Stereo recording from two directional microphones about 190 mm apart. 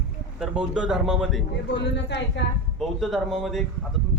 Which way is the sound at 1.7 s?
65° left (ahead or behind).